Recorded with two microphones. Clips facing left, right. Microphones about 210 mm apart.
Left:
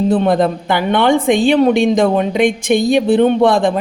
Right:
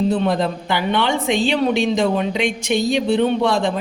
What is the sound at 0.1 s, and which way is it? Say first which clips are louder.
A woman's voice: left 6 dB; 55° left (ahead or behind).